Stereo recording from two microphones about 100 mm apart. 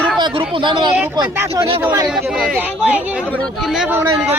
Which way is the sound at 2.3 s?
5° right (ahead or behind).